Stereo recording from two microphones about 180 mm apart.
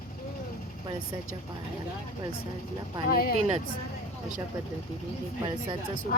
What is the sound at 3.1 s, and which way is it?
Speech, 55° left (ahead or behind).